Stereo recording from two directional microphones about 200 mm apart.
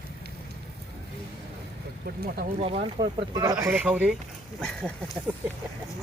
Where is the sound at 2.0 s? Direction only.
50° right (ahead or behind).